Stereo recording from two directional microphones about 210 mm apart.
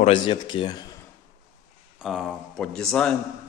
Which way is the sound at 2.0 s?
Centre (ahead or behind).